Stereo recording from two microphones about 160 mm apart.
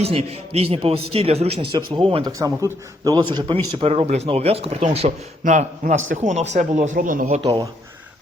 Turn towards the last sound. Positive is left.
turn(degrees=-30)  # may be behind; listen again after turning